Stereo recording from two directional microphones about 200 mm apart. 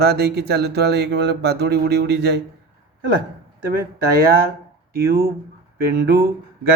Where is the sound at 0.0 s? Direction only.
55° right (ahead or behind).